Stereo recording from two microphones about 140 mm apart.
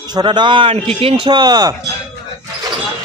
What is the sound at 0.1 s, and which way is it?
Speech, 30° right (ahead or behind).